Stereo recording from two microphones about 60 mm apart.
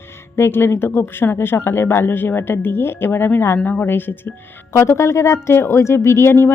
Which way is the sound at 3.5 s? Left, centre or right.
Left.